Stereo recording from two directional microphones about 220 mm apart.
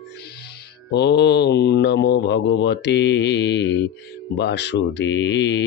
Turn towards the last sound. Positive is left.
turn(degrees=50)  # may be behind; listen again after turning